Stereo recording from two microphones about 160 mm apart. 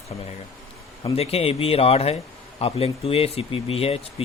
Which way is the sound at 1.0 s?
40° left (ahead or behind).